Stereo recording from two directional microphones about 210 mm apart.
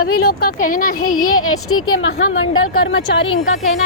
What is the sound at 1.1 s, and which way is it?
Speech, 90° left.